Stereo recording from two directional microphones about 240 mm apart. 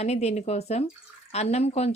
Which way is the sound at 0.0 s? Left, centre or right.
Left.